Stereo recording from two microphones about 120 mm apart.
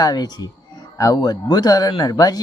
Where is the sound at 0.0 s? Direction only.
30° left (ahead or behind).